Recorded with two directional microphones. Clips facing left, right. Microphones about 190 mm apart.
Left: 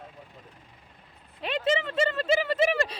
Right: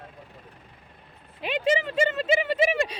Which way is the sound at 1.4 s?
5° right (ahead or behind).